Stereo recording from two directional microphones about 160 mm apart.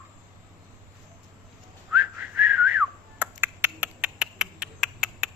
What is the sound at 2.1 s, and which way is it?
Whistling, 10° right (ahead or behind).